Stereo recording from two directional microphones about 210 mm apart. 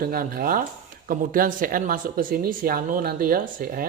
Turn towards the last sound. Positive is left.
turn(degrees=-45)  # may be behind; listen again after turning